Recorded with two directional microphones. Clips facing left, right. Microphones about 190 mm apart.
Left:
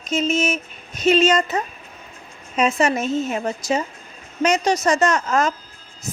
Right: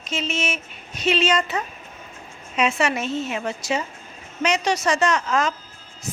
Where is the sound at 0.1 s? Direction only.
40° left (ahead or behind).